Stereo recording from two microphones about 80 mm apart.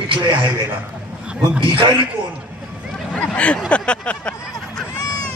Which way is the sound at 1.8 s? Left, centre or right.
Right.